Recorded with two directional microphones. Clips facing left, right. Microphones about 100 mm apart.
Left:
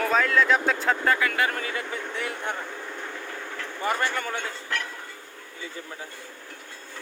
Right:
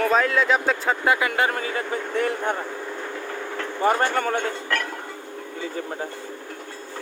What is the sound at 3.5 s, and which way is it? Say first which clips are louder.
Speech: right 7 dB; 35° right (ahead or behind).